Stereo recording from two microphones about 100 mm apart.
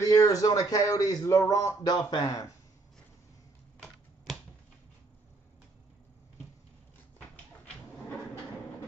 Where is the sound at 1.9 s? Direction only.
45° left (ahead or behind).